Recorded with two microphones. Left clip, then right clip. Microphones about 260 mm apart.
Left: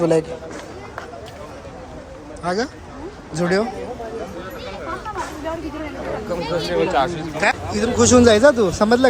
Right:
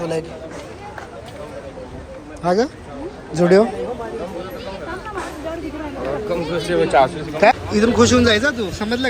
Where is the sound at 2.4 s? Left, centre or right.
Centre.